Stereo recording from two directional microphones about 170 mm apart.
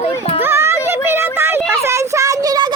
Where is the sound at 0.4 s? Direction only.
15° right (ahead or behind).